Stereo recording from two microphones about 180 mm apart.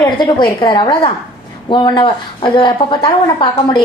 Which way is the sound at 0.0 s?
25° left (ahead or behind).